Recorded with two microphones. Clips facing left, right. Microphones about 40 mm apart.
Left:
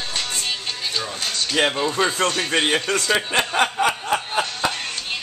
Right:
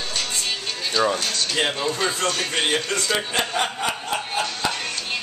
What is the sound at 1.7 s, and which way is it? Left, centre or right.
Music, centre.